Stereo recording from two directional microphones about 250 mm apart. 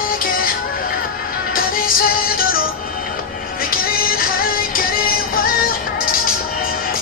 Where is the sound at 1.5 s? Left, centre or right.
Left.